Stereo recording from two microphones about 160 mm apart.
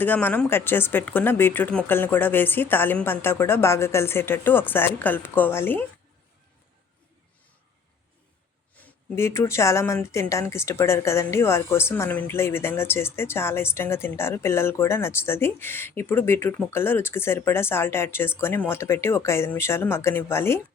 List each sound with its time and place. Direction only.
0.0 s speech: 10° left (ahead or behind)
8.7 s speech: 15° left (ahead or behind)